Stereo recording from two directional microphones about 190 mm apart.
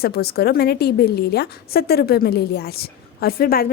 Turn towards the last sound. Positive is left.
turn(degrees=50)  # may be behind; listen again after turning